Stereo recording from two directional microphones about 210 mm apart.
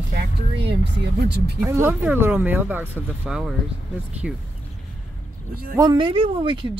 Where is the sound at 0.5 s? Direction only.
55° right (ahead or behind).